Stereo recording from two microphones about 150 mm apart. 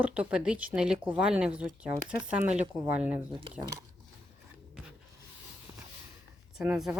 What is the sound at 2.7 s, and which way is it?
Speech, 20° right (ahead or behind).